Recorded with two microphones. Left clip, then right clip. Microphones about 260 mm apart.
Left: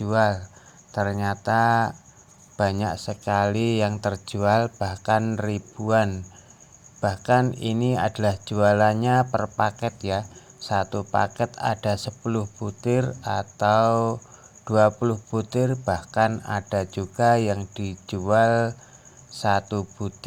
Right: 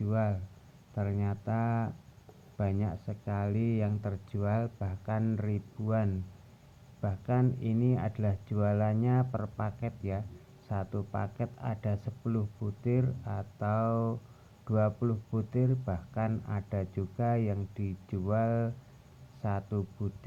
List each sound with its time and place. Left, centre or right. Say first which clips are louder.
0.1 s speech: left 14 dB; left